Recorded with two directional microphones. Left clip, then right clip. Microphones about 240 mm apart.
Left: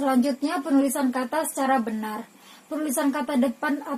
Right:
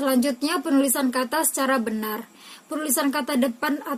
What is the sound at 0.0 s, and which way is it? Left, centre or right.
Speech, right.